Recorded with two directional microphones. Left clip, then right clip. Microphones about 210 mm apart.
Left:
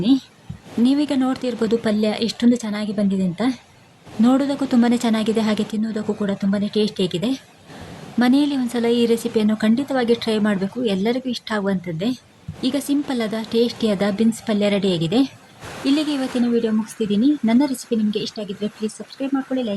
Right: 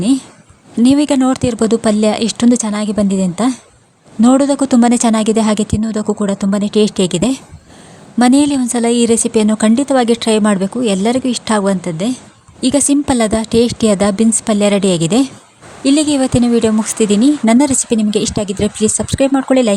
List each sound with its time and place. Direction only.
0.8 s a woman's voice: 45° right (ahead or behind)